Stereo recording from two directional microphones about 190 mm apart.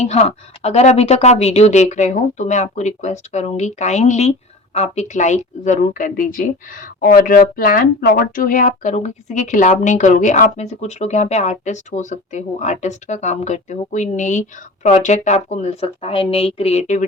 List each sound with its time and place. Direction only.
0.0 s a woman's voice: 35° left (ahead or behind)